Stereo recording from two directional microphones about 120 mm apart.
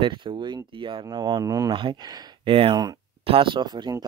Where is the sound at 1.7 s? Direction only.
45° right (ahead or behind).